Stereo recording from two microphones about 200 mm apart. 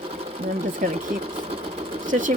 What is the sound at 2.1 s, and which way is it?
Speech, 40° right (ahead or behind).